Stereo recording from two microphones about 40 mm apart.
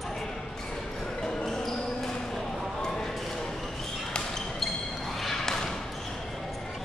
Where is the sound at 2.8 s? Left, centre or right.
Centre.